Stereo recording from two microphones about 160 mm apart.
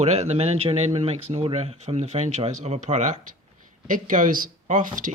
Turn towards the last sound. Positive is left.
turn(degrees=-55)  # may be behind; listen again after turning